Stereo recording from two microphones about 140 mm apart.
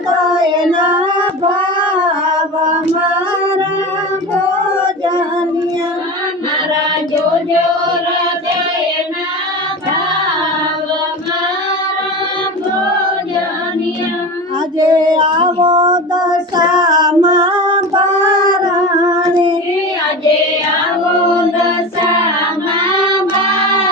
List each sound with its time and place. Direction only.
0.3 s child singing: 30° right (ahead or behind)
1.8 s singing: 35° right (ahead or behind)
14.8 s child singing: 30° right (ahead or behind)